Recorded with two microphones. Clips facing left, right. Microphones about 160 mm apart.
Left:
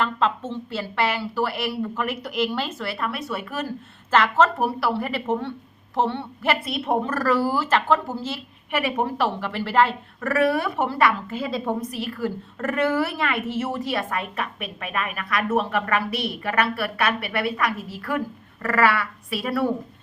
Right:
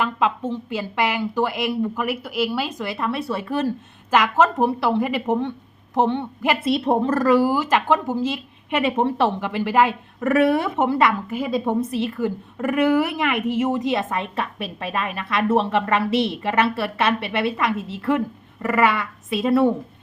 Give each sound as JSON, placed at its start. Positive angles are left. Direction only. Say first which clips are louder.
{"t": 0.0, "sound": "a woman's voice", "louder": "right 2 dB", "side_deg": -15}
{"t": 4.1, "sound": "a woman's voice", "louder": "right 1 dB", "side_deg": -15}
{"t": 6.7, "sound": "a woman's voice", "louder": "right 5 dB", "side_deg": -30}
{"t": 7.2, "sound": "a woman's voice", "louder": "right 4 dB", "side_deg": -15}
{"t": 11.8, "sound": "a woman's voice", "louder": "right 5 dB", "side_deg": -25}